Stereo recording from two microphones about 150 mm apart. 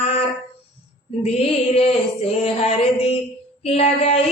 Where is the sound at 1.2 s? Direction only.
45° left (ahead or behind).